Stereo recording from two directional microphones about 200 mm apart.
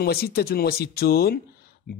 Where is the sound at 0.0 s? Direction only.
50° left (ahead or behind).